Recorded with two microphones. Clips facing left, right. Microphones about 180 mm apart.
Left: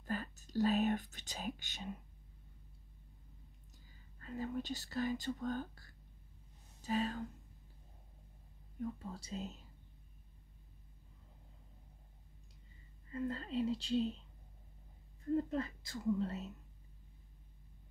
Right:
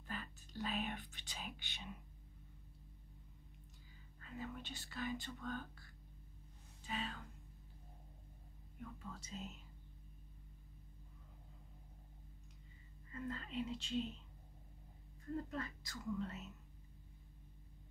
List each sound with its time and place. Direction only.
0.0 s whispering: 40° left (ahead or behind)
4.2 s speech: 40° left (ahead or behind)
8.7 s speech: 35° left (ahead or behind)
13.1 s speech: 35° left (ahead or behind)
15.3 s speech: 30° left (ahead or behind)